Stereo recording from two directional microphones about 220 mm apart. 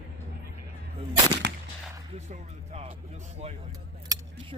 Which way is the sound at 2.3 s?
30° right (ahead or behind).